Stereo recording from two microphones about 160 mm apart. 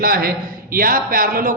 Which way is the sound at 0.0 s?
70° right (ahead or behind).